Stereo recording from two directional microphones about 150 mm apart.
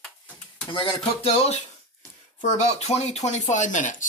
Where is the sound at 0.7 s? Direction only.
35° left (ahead or behind).